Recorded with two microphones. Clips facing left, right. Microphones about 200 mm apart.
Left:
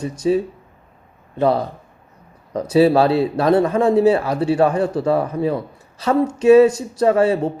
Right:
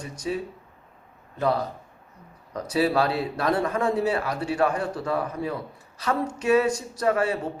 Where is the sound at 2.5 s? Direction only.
30° left (ahead or behind).